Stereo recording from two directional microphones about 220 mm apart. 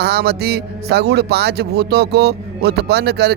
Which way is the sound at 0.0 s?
50° right (ahead or behind).